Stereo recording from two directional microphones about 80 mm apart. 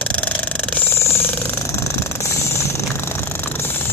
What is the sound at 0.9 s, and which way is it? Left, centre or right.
Jackhammer, left.